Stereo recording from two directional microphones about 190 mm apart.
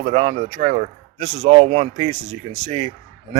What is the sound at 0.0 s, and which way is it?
A man's voice, 35° right (ahead or behind).